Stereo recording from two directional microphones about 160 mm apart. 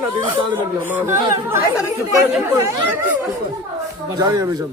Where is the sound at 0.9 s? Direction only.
10° right (ahead or behind).